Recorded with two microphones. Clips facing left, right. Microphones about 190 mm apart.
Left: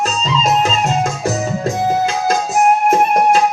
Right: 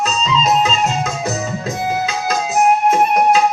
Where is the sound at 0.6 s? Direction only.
45° left (ahead or behind).